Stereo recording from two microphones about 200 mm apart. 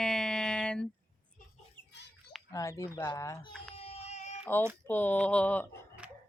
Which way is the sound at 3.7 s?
30° left (ahead or behind).